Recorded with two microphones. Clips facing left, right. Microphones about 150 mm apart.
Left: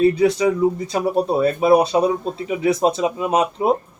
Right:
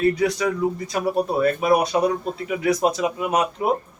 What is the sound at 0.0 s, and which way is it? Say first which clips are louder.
Speech: left 5 dB; 25° left (ahead or behind).